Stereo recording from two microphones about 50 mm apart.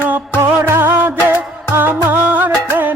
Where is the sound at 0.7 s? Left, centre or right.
Right.